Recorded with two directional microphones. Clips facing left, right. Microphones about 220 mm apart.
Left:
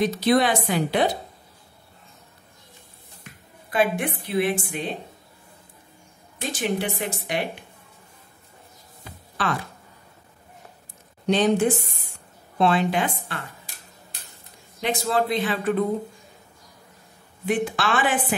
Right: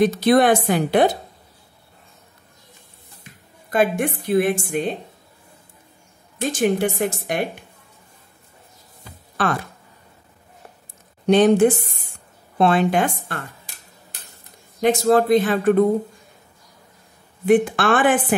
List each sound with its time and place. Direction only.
0.0 s speech: 50° right (ahead or behind)
3.7 s speech: 45° right (ahead or behind)
6.3 s speech: 45° right (ahead or behind)
9.4 s speech: 50° right (ahead or behind)
11.2 s a woman's voice: 55° right (ahead or behind)
12.5 s speech: 50° right (ahead or behind)
14.8 s speech: 45° right (ahead or behind)
17.5 s speech: 55° right (ahead or behind)